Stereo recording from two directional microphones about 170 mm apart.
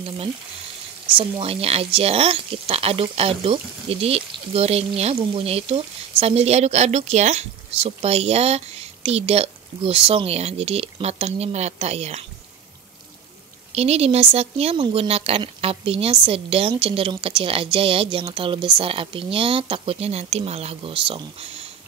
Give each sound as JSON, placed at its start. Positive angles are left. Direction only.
{"t": 1.4, "sound": "speech", "side_deg": -35}
{"t": 13.7, "sound": "speech", "side_deg": -40}